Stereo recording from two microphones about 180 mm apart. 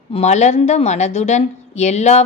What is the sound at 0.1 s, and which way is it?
A woman's voice, 40° left (ahead or behind).